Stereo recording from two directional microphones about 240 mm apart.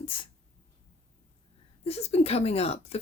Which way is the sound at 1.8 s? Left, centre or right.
Left.